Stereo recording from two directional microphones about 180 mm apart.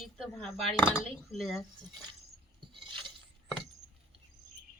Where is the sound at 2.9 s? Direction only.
25° right (ahead or behind).